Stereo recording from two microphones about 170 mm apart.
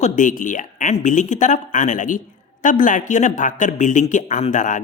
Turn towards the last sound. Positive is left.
turn(degrees=45)  # may be behind; listen again after turning